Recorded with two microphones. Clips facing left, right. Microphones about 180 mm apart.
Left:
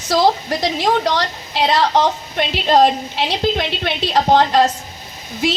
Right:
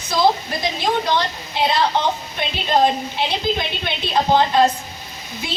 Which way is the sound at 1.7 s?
90° left.